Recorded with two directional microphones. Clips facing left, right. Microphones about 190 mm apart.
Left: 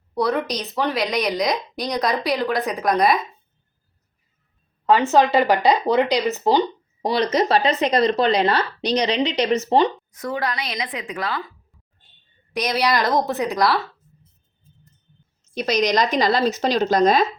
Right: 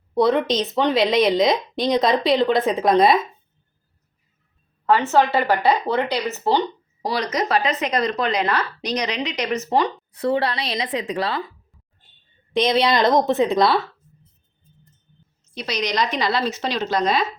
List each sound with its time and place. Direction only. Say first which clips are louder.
0.1 s a woman's voice: right 4 dB; 20° right (ahead or behind)
4.9 s speech: left 1 dB; 15° left (ahead or behind)
10.2 s a woman's voice: right 6 dB; 30° right (ahead or behind)
12.5 s a woman's voice: right 3 dB; 25° right (ahead or behind)
15.5 s a woman's voice: left 4 dB; 45° left (ahead or behind)